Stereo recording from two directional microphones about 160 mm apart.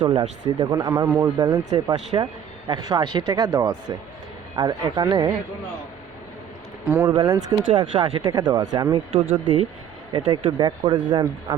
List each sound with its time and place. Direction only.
0.0 s speech: 25° right (ahead or behind)
6.8 s speech: 15° right (ahead or behind)
7.1 s speech: 25° right (ahead or behind)